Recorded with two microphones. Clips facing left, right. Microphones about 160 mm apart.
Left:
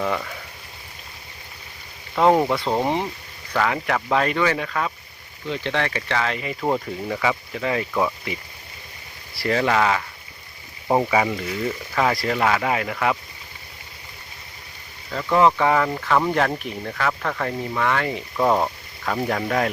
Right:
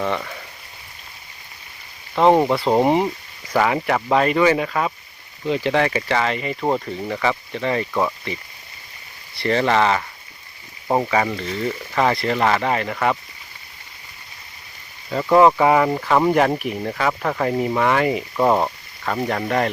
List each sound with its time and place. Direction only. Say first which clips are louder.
0.0 s speech: right 1 dB; centre (ahead or behind)
2.2 s speech: right 2 dB; centre (ahead or behind)
2.6 s speech: right 6 dB; 15° right (ahead or behind); by 8.3 s centre (ahead or behind)
9.4 s speech: right 2 dB; 5° left (ahead or behind)
15.1 s speech: right 5 dB; 20° right (ahead or behind)
15.4 s speech: right 4 dB; 10° right (ahead or behind)
18.1 s speech: right 3 dB; 10° right (ahead or behind)